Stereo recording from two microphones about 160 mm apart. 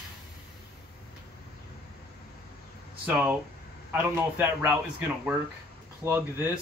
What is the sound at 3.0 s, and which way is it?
Speech, 10° right (ahead or behind).